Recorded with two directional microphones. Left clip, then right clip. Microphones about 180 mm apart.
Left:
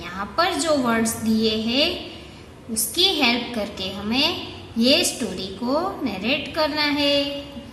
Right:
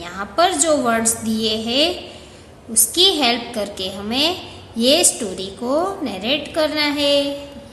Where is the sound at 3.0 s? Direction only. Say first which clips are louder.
Right 3 dB; 20° right (ahead or behind).